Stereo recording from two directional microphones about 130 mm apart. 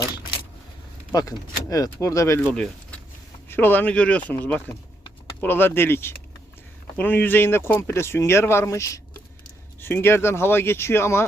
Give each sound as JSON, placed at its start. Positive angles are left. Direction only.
{"t": 1.7, "sound": "speech", "side_deg": 25}
{"t": 2.5, "sound": "speech", "side_deg": 5}